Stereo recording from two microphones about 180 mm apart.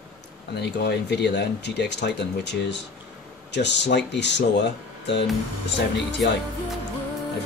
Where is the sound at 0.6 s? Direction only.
65° left (ahead or behind).